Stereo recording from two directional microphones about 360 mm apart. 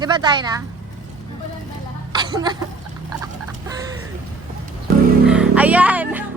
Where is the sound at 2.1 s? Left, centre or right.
Centre.